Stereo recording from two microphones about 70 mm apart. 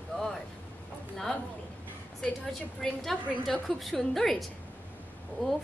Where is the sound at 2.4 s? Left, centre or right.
Centre.